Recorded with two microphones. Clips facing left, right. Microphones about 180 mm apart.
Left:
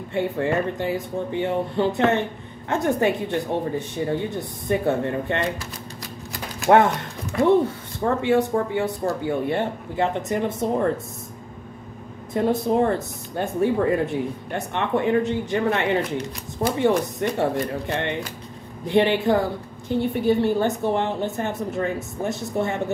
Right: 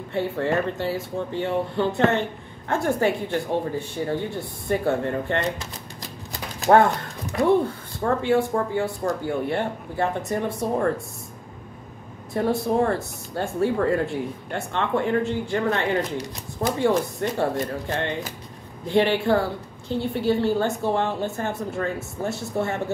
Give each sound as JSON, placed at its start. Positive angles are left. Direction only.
{"t": 0.1, "sound": "a woman's voice", "side_deg": 15}
{"t": 6.6, "sound": "speech", "side_deg": 20}
{"t": 8.2, "sound": "speech", "side_deg": 20}
{"t": 12.4, "sound": "a woman's voice", "side_deg": 20}